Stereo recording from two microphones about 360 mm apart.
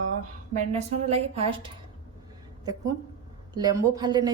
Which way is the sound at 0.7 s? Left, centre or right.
Centre.